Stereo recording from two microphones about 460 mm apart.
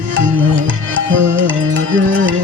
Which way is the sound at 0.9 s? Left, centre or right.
Right.